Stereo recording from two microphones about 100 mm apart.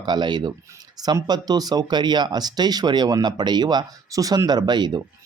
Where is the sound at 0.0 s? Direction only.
45° right (ahead or behind).